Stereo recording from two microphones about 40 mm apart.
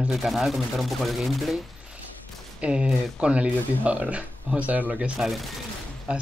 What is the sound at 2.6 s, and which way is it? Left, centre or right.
Speech, right.